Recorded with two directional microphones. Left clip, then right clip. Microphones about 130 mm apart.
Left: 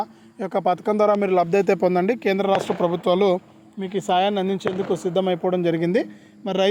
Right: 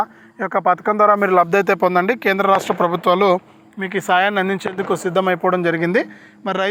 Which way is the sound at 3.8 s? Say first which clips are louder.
Right 4 dB; 15° left (ahead or behind).